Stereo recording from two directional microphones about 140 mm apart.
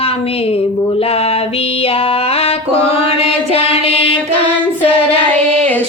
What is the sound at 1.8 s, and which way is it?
Mantra, 45° left (ahead or behind).